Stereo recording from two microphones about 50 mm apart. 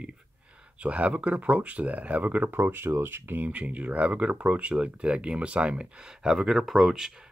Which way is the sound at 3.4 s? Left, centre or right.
Right.